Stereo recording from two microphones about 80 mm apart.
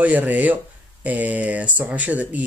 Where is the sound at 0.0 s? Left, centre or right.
Centre.